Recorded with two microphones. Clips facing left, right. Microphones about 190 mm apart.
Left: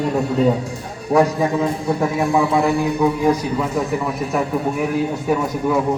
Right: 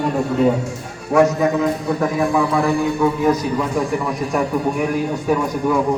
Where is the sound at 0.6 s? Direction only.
35° left (ahead or behind); by 5.8 s 5° left (ahead or behind).